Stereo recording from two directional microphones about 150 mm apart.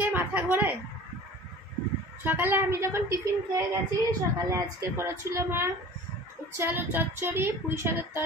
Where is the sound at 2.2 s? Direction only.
15° right (ahead or behind).